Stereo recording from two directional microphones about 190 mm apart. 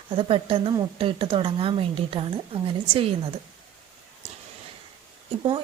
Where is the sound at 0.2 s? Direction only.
25° right (ahead or behind).